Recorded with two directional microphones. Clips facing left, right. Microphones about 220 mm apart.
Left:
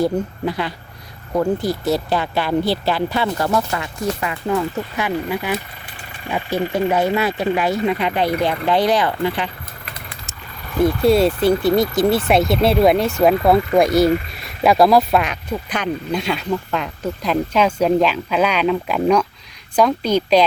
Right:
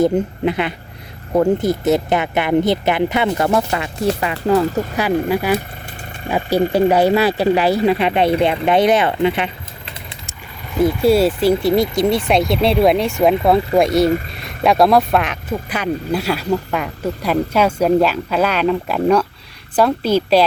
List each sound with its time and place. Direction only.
0.0 s speech: 20° right (ahead or behind); by 5.5 s 45° right (ahead or behind)
6.3 s speech: 35° right (ahead or behind)
10.8 s a woman's voice: centre (ahead or behind)